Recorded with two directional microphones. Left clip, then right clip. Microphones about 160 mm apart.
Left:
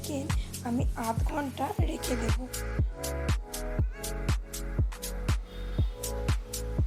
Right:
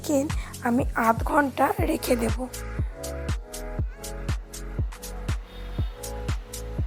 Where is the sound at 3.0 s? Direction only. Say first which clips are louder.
Right 1 dB; 5° right (ahead or behind).